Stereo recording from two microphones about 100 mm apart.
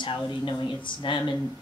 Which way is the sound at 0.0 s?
50° left (ahead or behind).